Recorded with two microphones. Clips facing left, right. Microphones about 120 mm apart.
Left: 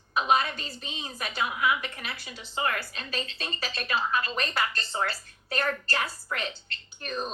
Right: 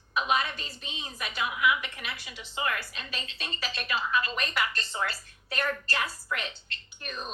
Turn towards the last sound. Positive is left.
turn(degrees=35)  # may be behind; listen again after turning